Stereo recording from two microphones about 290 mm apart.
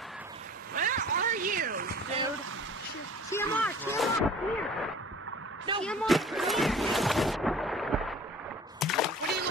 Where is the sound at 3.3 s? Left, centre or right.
Centre.